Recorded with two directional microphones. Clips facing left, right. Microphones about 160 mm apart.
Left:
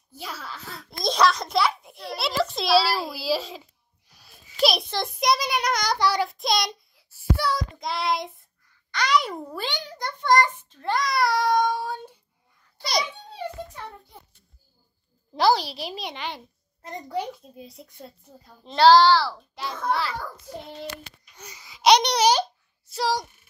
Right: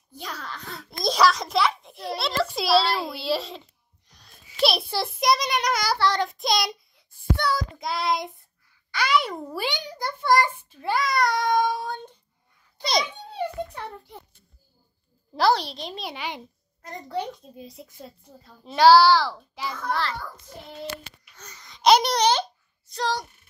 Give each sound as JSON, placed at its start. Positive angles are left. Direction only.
{"t": 0.1, "sound": "a child's voice", "side_deg": 5}
{"t": 5.9, "sound": "a child's voice", "side_deg": 10}
{"t": 9.6, "sound": "a child's voice", "side_deg": -15}
{"t": 12.7, "sound": "babbling", "side_deg": -25}
{"t": 15.3, "sound": "a child's voice", "side_deg": 0}
{"t": 16.1, "sound": "a child's voice", "side_deg": -10}
{"t": 17.1, "sound": "a child's voice", "side_deg": 10}
{"t": 21.4, "sound": "a child's voice", "side_deg": 10}